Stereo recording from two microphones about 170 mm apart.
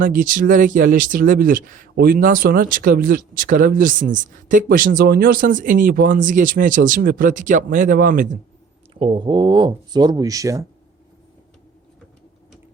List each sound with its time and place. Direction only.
0.0 s speech: 55° right (ahead or behind)
9.0 s speech: 30° right (ahead or behind)